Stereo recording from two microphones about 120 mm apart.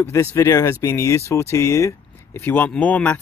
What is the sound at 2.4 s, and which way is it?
Speech, 15° left (ahead or behind).